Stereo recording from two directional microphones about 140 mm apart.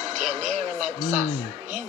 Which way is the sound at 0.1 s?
60° right (ahead or behind).